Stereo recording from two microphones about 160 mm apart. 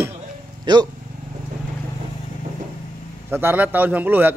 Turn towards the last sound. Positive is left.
turn(degrees=-10)  # may be behind; listen again after turning